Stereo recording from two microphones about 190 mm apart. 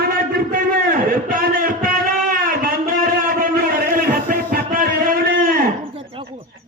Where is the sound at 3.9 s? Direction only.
50° right (ahead or behind).